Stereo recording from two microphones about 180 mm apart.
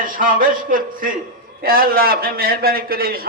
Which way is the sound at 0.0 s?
50° right (ahead or behind).